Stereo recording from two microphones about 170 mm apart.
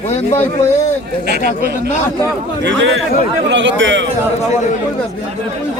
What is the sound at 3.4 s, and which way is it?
Speech, 90° right.